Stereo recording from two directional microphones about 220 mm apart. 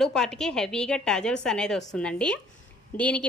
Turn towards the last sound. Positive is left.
turn(degrees=5)  # may be behind; listen again after turning